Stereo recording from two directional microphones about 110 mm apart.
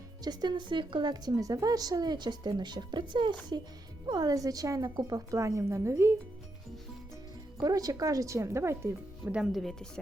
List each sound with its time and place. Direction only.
0.3 s a woman's voice: 40° right (ahead or behind); by 6.1 s 25° right (ahead or behind)
7.6 s speech: 35° right (ahead or behind)
9.3 s speech: centre (ahead or behind)